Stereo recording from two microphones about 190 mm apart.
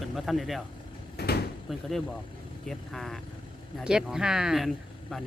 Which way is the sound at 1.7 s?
Centre (ahead or behind).